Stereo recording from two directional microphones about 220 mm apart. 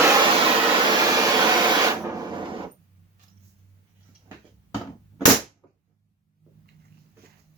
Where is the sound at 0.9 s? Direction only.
15° right (ahead or behind).